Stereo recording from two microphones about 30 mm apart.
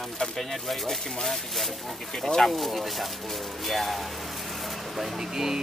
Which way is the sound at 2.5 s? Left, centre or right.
Centre.